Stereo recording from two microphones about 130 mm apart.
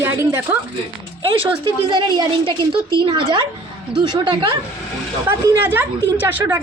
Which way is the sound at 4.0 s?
40° right (ahead or behind).